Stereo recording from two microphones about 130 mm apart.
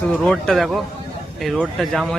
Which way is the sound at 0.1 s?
5° left (ahead or behind).